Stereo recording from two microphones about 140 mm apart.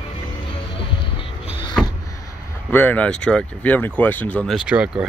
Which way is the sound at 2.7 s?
15° left (ahead or behind).